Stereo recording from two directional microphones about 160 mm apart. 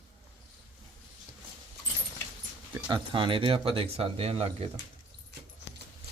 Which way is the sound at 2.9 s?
30° right (ahead or behind).